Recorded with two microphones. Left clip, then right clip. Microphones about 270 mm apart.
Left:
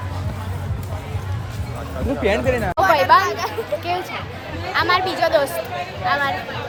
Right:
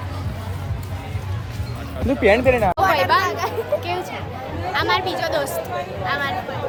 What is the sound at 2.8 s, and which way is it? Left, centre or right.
Speech, centre.